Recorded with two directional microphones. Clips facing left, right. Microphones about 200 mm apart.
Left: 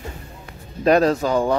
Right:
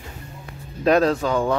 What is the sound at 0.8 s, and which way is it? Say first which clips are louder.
Speech: left 1 dB; centre (ahead or behind).